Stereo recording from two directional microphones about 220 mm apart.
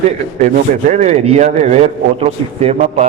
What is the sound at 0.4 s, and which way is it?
A man's voice, 35° right (ahead or behind).